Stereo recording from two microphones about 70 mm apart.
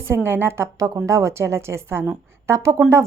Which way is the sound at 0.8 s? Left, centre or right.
Right.